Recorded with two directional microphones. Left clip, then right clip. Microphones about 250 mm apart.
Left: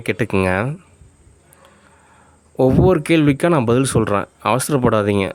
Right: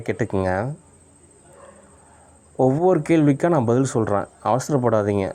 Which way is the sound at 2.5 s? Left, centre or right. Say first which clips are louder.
Left 3 dB; left.